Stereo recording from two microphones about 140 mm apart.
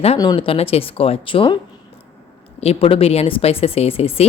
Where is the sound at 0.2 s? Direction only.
30° left (ahead or behind).